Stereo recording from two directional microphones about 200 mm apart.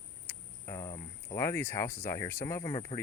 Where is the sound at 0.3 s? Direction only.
15° left (ahead or behind).